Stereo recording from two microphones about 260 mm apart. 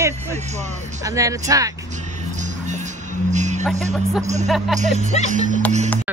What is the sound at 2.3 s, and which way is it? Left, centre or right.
Music, right.